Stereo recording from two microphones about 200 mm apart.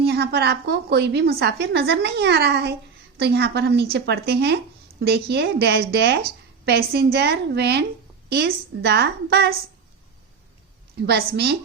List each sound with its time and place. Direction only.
0.0 s a woman's voice: 55° right (ahead or behind)
11.0 s a woman's voice: 55° right (ahead or behind)